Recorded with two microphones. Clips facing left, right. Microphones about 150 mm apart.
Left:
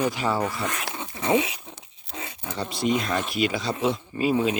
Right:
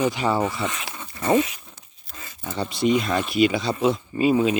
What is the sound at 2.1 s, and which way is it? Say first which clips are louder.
Dog: left 6 dB; 70° left (ahead or behind).